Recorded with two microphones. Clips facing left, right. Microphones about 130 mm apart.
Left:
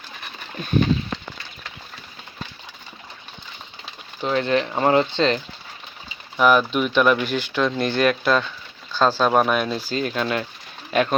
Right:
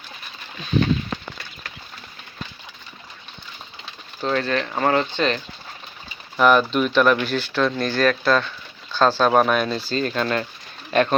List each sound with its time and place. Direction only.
4.2 s speech: 15° left (ahead or behind)
6.3 s speech: 5° left (ahead or behind); by 8.0 s 20° left (ahead or behind)
8.0 s speech: 10° left (ahead or behind)